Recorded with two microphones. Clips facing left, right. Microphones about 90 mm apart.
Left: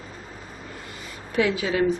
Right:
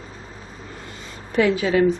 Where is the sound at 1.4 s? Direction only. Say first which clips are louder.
Right 5 dB; 50° right (ahead or behind).